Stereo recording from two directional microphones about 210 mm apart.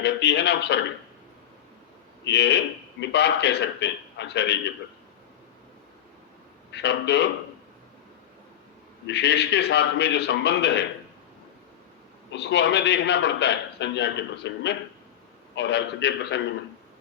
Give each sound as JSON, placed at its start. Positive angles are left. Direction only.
{"t": 0.0, "sound": "a man's voice", "side_deg": 55}
{"t": 2.2, "sound": "a man's voice", "side_deg": 55}
{"t": 6.7, "sound": "a man's voice", "side_deg": 55}
{"t": 9.0, "sound": "a man's voice", "side_deg": 55}
{"t": 12.3, "sound": "a man's voice", "side_deg": 55}